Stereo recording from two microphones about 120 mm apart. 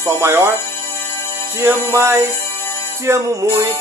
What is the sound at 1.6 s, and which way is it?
Music, 20° right (ahead or behind).